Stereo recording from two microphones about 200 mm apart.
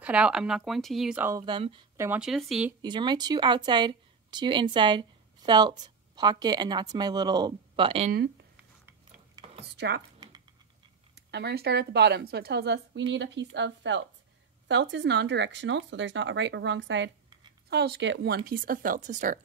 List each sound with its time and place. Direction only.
0.0 s speech: 5° right (ahead or behind)
1.4 s a woman's voice: 25° right (ahead or behind)
2.0 s speech: 5° right (ahead or behind)
2.8 s a woman's voice: 20° right (ahead or behind)
9.4 s a sound: 30° right (ahead or behind)
9.7 s speech: 55° right (ahead or behind)
11.2 s speech: 55° right (ahead or behind); by 19.4 s 40° right (ahead or behind)